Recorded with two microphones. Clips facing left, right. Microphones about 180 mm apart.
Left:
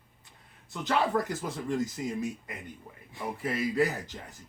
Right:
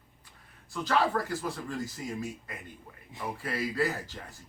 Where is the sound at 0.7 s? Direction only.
20° left (ahead or behind).